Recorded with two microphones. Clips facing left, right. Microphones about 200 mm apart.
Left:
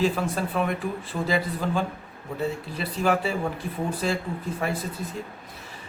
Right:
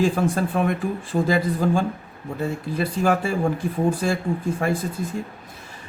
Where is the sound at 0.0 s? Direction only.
45° right (ahead or behind).